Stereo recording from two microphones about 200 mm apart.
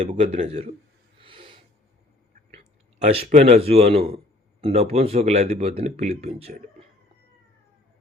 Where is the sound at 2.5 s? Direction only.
30° right (ahead or behind).